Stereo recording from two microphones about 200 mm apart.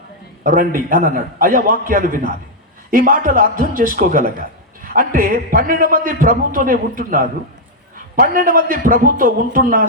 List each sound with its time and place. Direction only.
0.4 s a man's voice: 45° right (ahead or behind)